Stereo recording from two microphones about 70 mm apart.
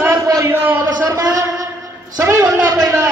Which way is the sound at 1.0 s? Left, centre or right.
Right.